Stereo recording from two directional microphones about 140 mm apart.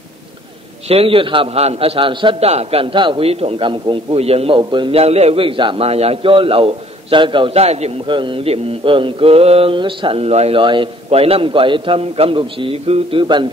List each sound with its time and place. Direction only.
0.8 s a man's voice: 45° right (ahead or behind)
8.1 s a man's voice: 35° right (ahead or behind)